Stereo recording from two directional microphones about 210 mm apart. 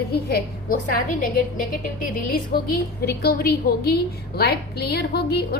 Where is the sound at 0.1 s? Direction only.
50° left (ahead or behind).